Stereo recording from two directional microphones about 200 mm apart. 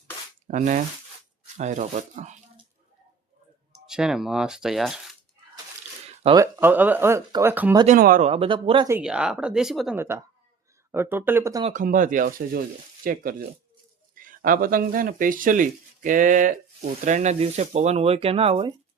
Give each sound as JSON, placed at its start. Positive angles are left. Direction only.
{"t": 0.4, "sound": "speech", "side_deg": -40}
{"t": 3.7, "sound": "speech", "side_deg": -5}
{"t": 6.3, "sound": "speech", "side_deg": -15}
{"t": 7.9, "sound": "speech", "side_deg": -45}
{"t": 8.3, "sound": "speech", "side_deg": -25}
{"t": 8.9, "sound": "speech", "side_deg": -5}
{"t": 10.0, "sound": "speech", "side_deg": -10}
{"t": 11.6, "sound": "speech", "side_deg": -40}